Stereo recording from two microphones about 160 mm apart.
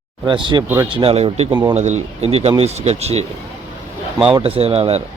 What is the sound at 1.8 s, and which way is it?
Speech, 45° right (ahead or behind).